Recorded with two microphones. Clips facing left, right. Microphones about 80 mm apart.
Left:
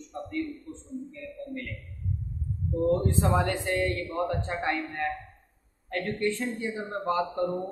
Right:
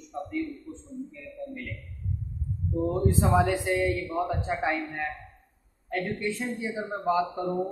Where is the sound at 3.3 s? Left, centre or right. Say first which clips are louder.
Right 3 dB; centre.